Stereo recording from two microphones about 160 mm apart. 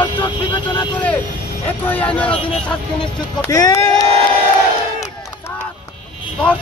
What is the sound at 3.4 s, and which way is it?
Speech, 20° left (ahead or behind).